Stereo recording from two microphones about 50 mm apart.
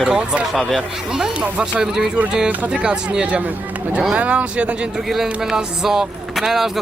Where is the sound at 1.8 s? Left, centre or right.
Centre.